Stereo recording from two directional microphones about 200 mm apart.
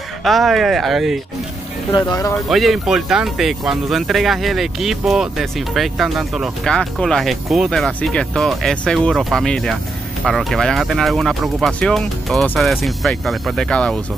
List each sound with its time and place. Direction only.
0.2 s speech: centre (ahead or behind)
1.9 s speech: 20° left (ahead or behind)
2.3 s speech: centre (ahead or behind)